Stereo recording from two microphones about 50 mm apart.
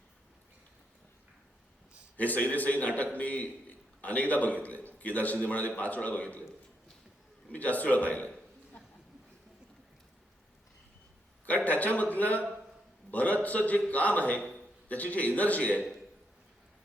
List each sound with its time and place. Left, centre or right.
2.1 s a man's voice: left
7.5 s a man's voice: left
11.4 s a man's voice: left